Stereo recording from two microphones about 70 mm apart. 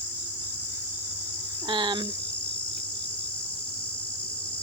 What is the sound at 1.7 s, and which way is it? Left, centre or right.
Cricket, right.